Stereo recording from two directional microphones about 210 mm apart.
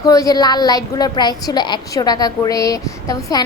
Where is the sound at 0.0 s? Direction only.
15° left (ahead or behind).